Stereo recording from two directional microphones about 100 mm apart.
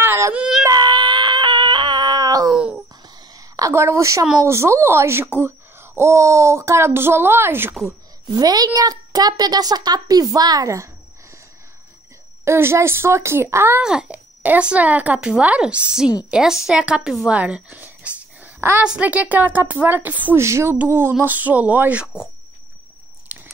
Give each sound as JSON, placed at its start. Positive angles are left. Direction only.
{"t": 0.0, "sound": "yodeling", "side_deg": -25}
{"t": 0.4, "sound": "yodeling", "side_deg": -5}
{"t": 0.7, "sound": "a sound", "side_deg": -45}
{"t": 2.5, "sound": "a sound", "side_deg": -10}
{"t": 3.3, "sound": "a woman's voice", "side_deg": -35}
{"t": 8.3, "sound": "a woman's voice", "side_deg": -40}
{"t": 12.4, "sound": "speech", "side_deg": -25}
{"t": 13.7, "sound": "a woman's voice", "side_deg": -10}
{"t": 17.3, "sound": "a sound", "side_deg": -10}
{"t": 18.8, "sound": "speech", "side_deg": -15}
{"t": 20.4, "sound": "speech", "side_deg": -25}
{"t": 23.3, "sound": "biting", "side_deg": -15}